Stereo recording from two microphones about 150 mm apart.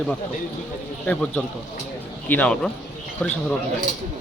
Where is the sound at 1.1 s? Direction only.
5° left (ahead or behind).